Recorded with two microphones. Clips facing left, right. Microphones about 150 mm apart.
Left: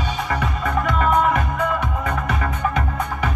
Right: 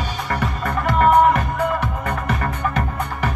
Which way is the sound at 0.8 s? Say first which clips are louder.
Right 5 dB; 50° right (ahead or behind).